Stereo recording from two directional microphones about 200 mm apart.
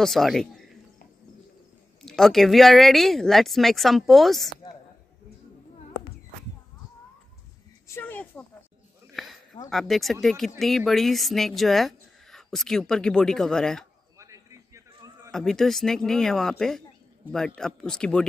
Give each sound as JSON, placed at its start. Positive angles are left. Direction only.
{"t": 0.0, "sound": "speech", "side_deg": 0}
{"t": 2.0, "sound": "speech", "side_deg": 0}
{"t": 7.9, "sound": "a sound", "side_deg": 10}
{"t": 9.7, "sound": "speech", "side_deg": 0}
{"t": 14.1, "sound": "a sound", "side_deg": -15}
{"t": 15.3, "sound": "speech", "side_deg": 0}